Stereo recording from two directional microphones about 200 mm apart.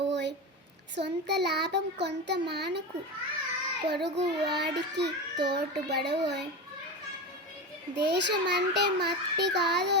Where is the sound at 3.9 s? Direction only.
55° right (ahead or behind).